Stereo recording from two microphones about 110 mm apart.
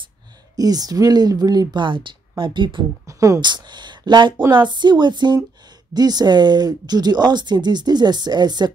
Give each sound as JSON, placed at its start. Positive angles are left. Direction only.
{"t": 0.6, "sound": "speech", "side_deg": -35}
{"t": 3.1, "sound": "speech", "side_deg": -30}
{"t": 3.3, "sound": "speech", "side_deg": -40}